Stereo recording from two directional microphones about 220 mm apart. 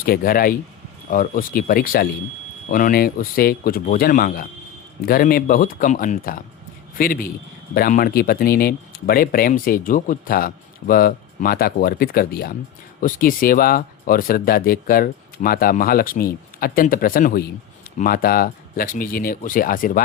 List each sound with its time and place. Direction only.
0.0 s speech: 40° left (ahead or behind)